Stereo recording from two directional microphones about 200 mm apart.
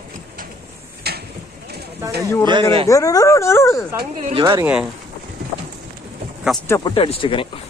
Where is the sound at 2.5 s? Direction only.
25° right (ahead or behind).